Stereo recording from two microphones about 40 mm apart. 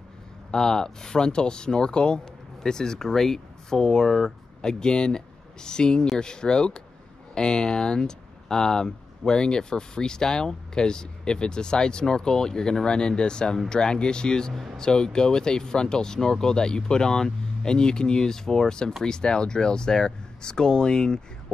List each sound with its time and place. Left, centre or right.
0.5 s speech: centre